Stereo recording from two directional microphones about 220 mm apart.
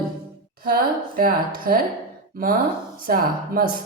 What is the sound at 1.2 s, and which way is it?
Speech, 40° right (ahead or behind).